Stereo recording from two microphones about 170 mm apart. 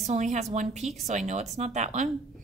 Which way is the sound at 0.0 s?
45° right (ahead or behind).